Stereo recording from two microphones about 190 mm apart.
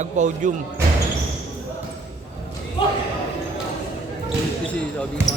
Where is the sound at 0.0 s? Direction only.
40° right (ahead or behind).